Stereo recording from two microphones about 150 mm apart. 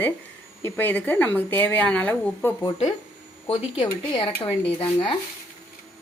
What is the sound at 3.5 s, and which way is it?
Speech, 35° left (ahead or behind).